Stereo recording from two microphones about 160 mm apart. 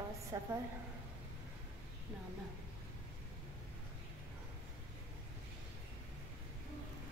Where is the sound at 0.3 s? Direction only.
20° right (ahead or behind).